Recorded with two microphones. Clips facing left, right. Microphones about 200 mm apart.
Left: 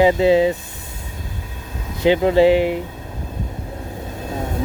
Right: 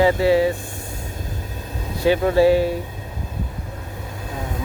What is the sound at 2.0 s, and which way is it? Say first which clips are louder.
Speech: left 2 dB; 20° left (ahead or behind).